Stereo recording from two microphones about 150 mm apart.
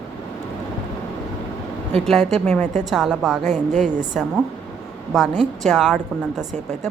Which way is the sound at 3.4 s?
50° right (ahead or behind).